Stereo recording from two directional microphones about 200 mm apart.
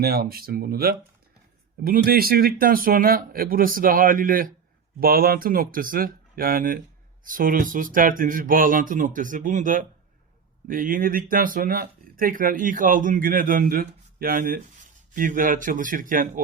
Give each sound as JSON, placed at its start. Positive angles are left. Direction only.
{"t": 0.0, "sound": "speech", "side_deg": -50}